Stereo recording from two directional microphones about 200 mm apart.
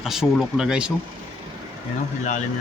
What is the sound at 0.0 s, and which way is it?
Speech, centre (ahead or behind).